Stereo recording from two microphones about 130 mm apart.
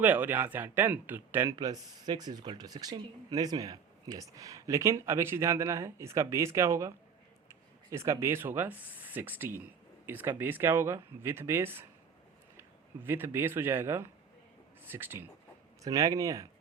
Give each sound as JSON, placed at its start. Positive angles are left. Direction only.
{"t": 0.0, "sound": "speech", "side_deg": -15}
{"t": 1.5, "sound": "speech", "side_deg": -30}
{"t": 15.8, "sound": "speech", "side_deg": -25}